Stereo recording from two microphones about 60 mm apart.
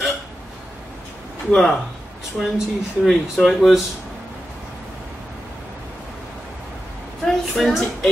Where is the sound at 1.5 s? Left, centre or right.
Centre.